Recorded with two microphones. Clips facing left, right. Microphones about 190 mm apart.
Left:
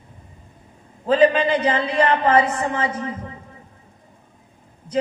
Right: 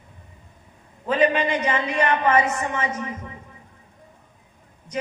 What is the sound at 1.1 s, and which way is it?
A man's voice, 30° left (ahead or behind).